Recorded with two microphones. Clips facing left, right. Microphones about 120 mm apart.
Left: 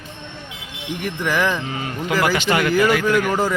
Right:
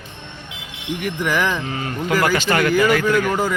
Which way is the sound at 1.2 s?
10° right (ahead or behind).